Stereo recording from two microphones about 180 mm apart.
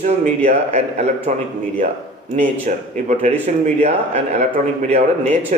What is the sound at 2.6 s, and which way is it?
Speech, 40° right (ahead or behind).